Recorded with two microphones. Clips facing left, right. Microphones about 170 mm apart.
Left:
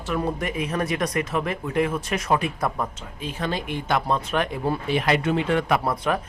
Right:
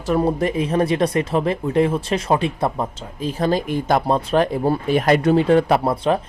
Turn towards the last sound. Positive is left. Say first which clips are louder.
# right 5 dB
turn(degrees=-30)  # may be behind; listen again after turning